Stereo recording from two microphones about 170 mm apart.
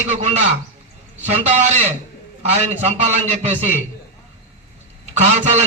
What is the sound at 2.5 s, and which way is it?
Speech, 40° right (ahead or behind).